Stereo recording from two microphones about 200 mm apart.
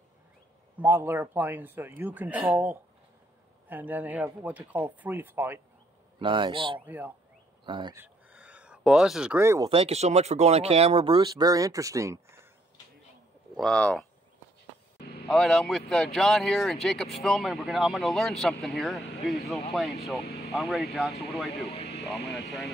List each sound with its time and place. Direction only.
0.7 s speech: 10° right (ahead or behind)
6.1 s speech: 25° right (ahead or behind)
7.9 s a sound: 10° right (ahead or behind)
9.7 s speech: 30° right (ahead or behind); by 12.4 s 15° right (ahead or behind)
13.6 s speech: 5° left (ahead or behind)
15.0 s vehicle: 50° left (ahead or behind)
15.2 s speech: 5° left (ahead or behind)